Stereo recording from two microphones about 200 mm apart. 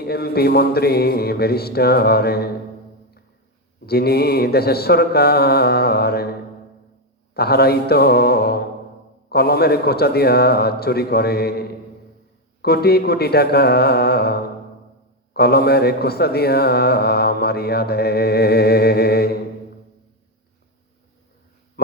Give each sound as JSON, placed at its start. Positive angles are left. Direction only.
{"t": 0.1, "sound": "speech", "side_deg": 50}
{"t": 3.8, "sound": "speech", "side_deg": 50}
{"t": 7.3, "sound": "speech", "side_deg": 50}
{"t": 12.6, "sound": "speech", "side_deg": 50}